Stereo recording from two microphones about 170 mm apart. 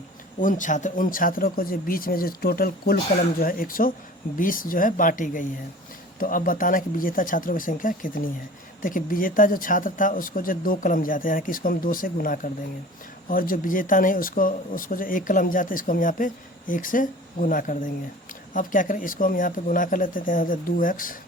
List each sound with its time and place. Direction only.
0.3 s speech: 50° left (ahead or behind)